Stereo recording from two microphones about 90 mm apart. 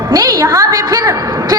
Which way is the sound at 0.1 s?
45° right (ahead or behind).